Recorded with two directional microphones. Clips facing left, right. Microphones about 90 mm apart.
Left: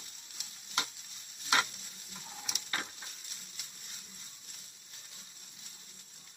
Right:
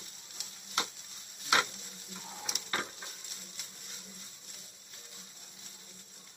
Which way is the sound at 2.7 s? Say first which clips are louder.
Right 3 dB; 35° right (ahead or behind).